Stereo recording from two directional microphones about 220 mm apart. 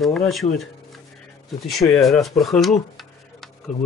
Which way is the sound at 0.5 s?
Centre (ahead or behind).